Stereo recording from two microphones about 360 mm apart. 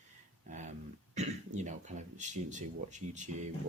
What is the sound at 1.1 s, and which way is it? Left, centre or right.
Speech, centre.